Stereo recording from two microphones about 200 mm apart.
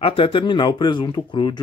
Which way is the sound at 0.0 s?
25° left (ahead or behind).